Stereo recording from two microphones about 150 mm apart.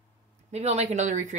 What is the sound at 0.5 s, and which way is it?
Speech, 45° right (ahead or behind).